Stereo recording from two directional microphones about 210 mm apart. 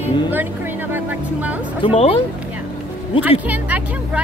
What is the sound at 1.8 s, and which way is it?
Mantra, 30° left (ahead or behind).